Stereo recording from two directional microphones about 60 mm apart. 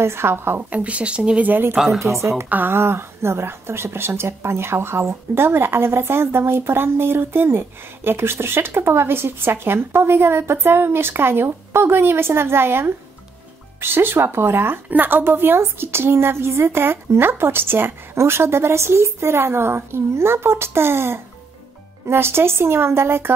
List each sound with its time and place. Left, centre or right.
0.0 s a woman's voice: right
0.7 s speech: right
2.0 s speech: right
2.5 s a woman's voice: right